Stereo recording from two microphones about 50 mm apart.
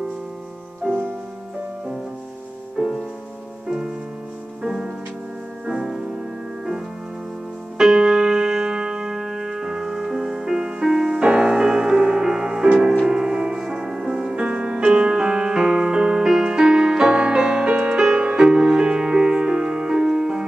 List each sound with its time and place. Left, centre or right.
0.8 s music: right
2.8 s music: centre
5.7 s music: centre
7.7 s music: centre